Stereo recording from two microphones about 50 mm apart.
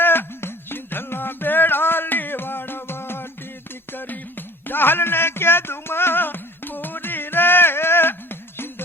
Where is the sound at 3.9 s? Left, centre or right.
Left.